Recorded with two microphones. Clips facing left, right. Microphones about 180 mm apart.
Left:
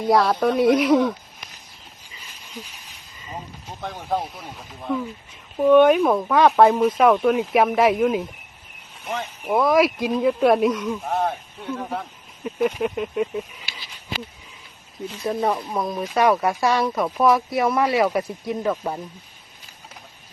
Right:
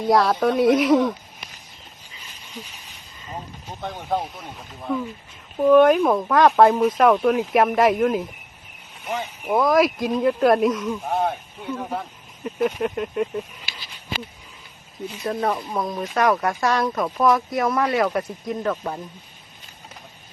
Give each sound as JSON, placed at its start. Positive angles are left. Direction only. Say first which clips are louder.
{"t": 0.0, "sound": "speech", "louder": "even", "side_deg": 0}
{"t": 3.8, "sound": "speech", "louder": "even", "side_deg": 0}
{"t": 15.0, "sound": "speech", "louder": "left 1 dB", "side_deg": 0}